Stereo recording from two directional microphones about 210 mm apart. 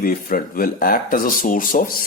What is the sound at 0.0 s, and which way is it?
Speech, 45° left (ahead or behind).